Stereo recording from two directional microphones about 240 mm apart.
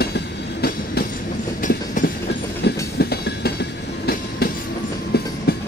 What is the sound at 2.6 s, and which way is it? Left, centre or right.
Train, left.